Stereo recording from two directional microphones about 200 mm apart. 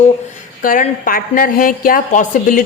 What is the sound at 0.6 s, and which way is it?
A woman's voice, 45° left (ahead or behind).